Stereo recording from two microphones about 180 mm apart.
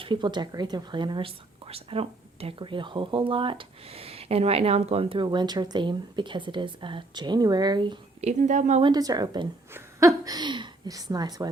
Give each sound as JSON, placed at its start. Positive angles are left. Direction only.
{"t": 0.0, "sound": "speech", "side_deg": -25}
{"t": 8.2, "sound": "speech", "side_deg": -40}
{"t": 8.8, "sound": "a woman's voice", "side_deg": -20}